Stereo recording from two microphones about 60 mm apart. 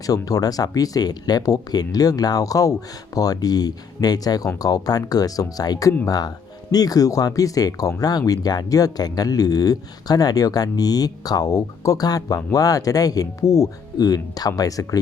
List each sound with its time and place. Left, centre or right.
0.1 s speech: left
3.2 s speech: left